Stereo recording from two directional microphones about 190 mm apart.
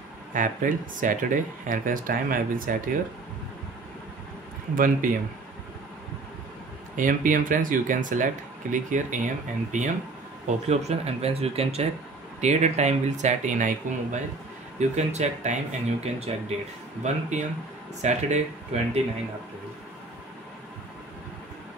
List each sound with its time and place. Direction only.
0.3 s speech: 45° right (ahead or behind)
4.7 s speech: 45° right (ahead or behind)
7.0 s speech: 45° right (ahead or behind)